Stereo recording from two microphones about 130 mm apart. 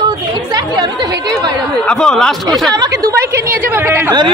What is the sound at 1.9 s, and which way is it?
Speech, 5° left (ahead or behind).